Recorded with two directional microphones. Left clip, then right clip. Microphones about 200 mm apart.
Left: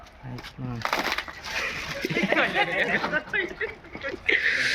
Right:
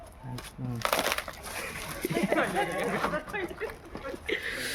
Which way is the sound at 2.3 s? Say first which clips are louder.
Left 7 dB; 50° right (ahead or behind).